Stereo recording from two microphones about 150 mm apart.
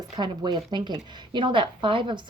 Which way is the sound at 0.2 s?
30° right (ahead or behind).